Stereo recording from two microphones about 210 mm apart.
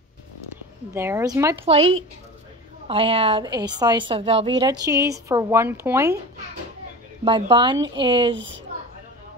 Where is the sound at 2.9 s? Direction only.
25° right (ahead or behind).